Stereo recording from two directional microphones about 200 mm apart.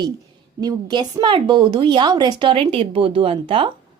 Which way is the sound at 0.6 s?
20° right (ahead or behind).